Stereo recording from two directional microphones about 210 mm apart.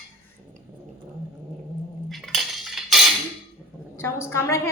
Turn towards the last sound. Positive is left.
turn(degrees=10)  # may be behind; listen again after turning